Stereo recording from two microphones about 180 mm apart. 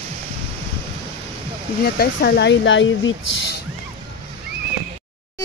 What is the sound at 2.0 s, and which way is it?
Speech, 70° left (ahead or behind).